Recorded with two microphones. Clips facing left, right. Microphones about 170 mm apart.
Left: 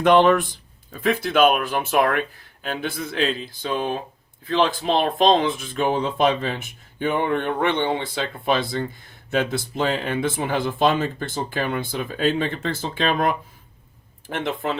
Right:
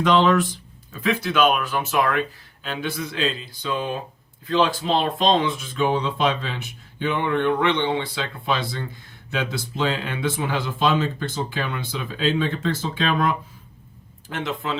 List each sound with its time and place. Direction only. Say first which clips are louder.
0.0 s speech: left 2 dB; 55° left (ahead or behind)